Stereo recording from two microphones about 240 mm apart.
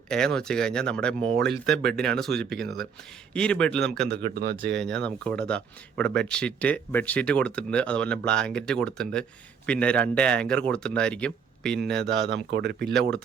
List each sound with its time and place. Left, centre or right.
0.1 s speech: centre
4.1 s speech: right
4.8 s speech: centre
12.0 s speech: right